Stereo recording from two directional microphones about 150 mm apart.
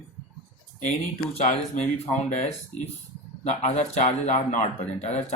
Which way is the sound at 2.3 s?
45° left (ahead or behind).